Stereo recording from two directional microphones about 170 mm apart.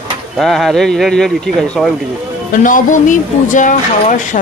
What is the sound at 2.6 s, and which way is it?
Speech, 50° left (ahead or behind).